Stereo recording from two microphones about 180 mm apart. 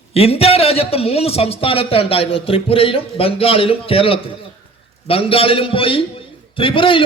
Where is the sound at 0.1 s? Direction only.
35° left (ahead or behind).